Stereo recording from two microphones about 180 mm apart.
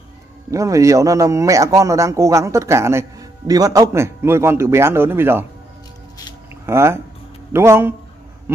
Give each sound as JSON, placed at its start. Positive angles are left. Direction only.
{"t": 0.5, "sound": "a man's voice", "side_deg": -15}
{"t": 6.6, "sound": "a man's voice", "side_deg": -15}